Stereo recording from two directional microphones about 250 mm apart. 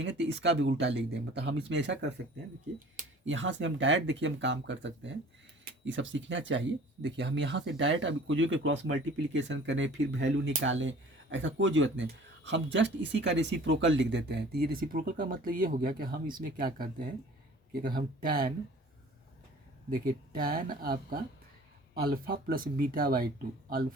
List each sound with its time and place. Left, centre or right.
0.0 s speech: right
2.7 s speech: right
3.2 s speech: right
19.9 s speech: right